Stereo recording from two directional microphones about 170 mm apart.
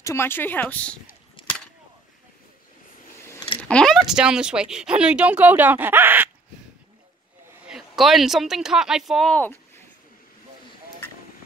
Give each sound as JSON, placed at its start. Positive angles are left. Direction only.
{"t": 0.0, "sound": "speech", "side_deg": 15}
{"t": 3.2, "sound": "a sound", "side_deg": 15}
{"t": 3.6, "sound": "a woman's voice", "side_deg": 5}
{"t": 7.6, "sound": "a woman's voice", "side_deg": 0}